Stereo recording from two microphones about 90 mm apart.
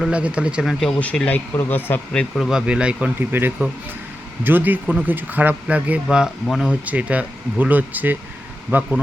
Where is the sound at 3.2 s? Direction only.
25° right (ahead or behind).